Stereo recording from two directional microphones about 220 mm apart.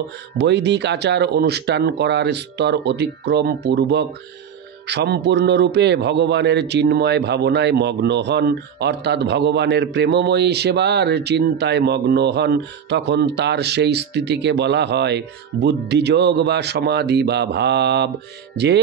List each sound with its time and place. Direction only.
0.4 s a man's voice: 50° right (ahead or behind)